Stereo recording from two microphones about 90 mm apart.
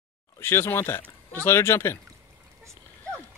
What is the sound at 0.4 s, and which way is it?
Speech, 25° left (ahead or behind).